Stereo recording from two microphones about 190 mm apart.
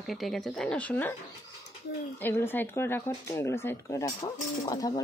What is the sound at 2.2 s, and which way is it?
Speech, 10° left (ahead or behind).